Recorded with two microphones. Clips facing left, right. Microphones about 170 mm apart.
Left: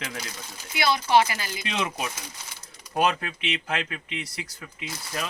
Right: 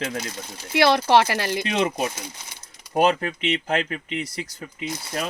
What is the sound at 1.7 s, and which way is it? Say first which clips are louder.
Speech: right 4 dB; 40° right (ahead or behind).